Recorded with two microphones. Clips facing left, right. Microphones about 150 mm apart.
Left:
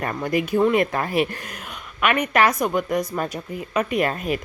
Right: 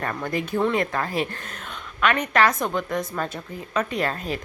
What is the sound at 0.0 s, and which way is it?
Speech, 15° left (ahead or behind).